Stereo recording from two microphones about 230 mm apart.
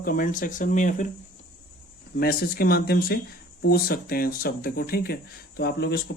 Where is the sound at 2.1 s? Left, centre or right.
Left.